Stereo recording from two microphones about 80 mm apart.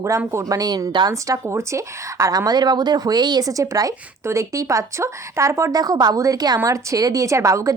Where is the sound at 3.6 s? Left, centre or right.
Right.